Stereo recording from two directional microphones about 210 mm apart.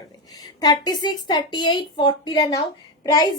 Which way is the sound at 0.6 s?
20° left (ahead or behind).